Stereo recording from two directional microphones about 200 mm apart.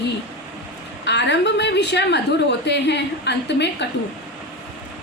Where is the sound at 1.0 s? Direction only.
60° left (ahead or behind).